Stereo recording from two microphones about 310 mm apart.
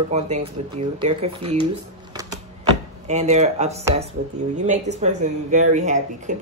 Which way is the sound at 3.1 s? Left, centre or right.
Right.